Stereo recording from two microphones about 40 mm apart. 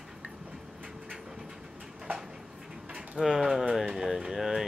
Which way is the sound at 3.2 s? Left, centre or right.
Centre.